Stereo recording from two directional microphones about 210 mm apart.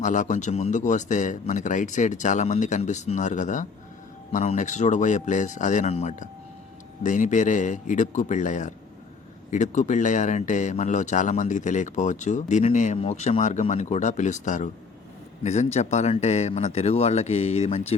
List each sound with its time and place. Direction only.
0.0 s a man's voice: 35° left (ahead or behind)